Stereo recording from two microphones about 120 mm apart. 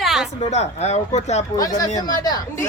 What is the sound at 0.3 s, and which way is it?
Speech, 65° left (ahead or behind).